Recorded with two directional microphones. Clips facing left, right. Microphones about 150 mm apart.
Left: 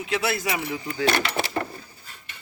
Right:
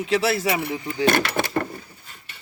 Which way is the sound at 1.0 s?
50° right (ahead or behind).